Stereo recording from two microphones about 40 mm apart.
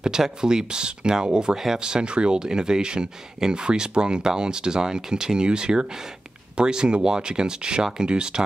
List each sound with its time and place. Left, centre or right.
0.0 s speech: centre